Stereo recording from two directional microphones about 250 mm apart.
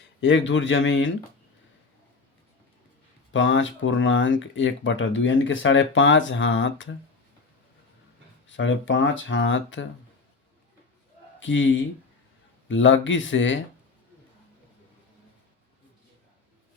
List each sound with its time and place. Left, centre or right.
0.2 s speech: left
3.3 s speech: left
8.4 s speech: left
11.3 s a man's voice: left